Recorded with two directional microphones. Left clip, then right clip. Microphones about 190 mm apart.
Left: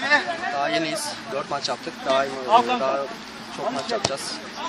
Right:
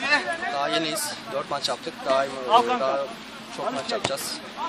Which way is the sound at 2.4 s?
25° left (ahead or behind).